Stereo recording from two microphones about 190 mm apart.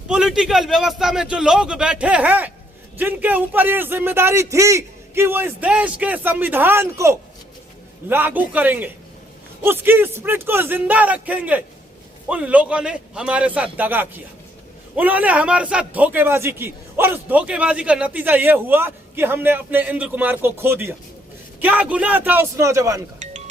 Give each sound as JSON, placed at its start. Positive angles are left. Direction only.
{"t": 0.1, "sound": "a man's voice", "side_deg": -5}
{"t": 23.2, "sound": "music", "side_deg": -40}